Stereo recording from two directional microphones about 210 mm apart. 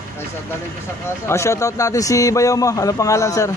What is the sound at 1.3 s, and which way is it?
Speech, 15° left (ahead or behind).